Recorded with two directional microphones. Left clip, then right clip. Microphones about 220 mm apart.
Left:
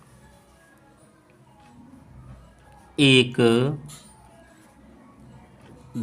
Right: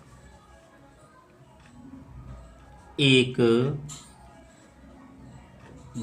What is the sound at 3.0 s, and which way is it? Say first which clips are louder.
Speech: left 3 dB; 45° left (ahead or behind).